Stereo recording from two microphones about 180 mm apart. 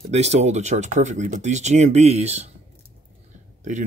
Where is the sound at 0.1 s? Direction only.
35° right (ahead or behind).